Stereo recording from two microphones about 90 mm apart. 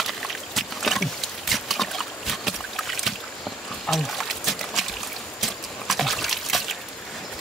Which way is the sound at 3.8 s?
Centre (ahead or behind).